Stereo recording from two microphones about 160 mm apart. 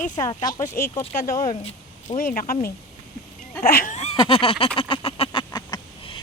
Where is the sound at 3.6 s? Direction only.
65° left (ahead or behind).